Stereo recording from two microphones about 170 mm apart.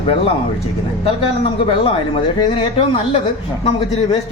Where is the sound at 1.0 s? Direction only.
30° left (ahead or behind).